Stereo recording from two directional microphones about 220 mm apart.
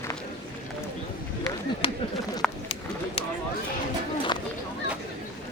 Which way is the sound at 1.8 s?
25° left (ahead or behind).